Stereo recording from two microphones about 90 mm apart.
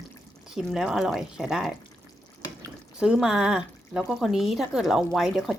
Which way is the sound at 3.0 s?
10° right (ahead or behind).